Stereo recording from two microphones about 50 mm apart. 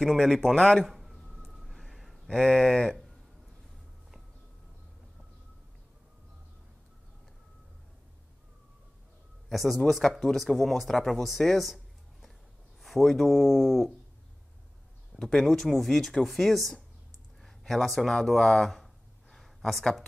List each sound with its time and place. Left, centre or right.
0.0 s speech: centre
0.8 s a sound: centre
2.3 s speech: centre
9.5 s speech: centre
15.1 s speech: centre
19.3 s a sound: centre